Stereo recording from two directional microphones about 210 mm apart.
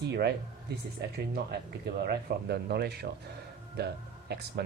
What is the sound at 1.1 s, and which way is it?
Speech, 50° right (ahead or behind).